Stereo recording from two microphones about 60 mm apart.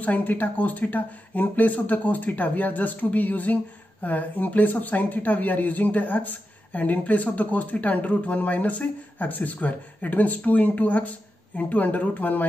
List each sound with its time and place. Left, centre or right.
0.0 s speech: left